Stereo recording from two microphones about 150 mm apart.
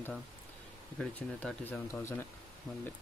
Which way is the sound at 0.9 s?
10° left (ahead or behind).